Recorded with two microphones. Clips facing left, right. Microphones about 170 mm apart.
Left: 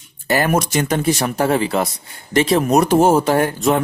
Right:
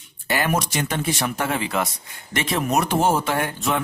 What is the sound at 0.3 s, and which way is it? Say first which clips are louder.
Speech: left 6 dB; 45° left (ahead or behind).